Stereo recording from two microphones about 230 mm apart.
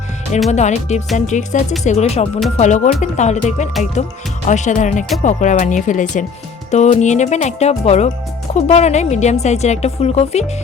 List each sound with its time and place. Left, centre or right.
0.5 s a woman's voice: left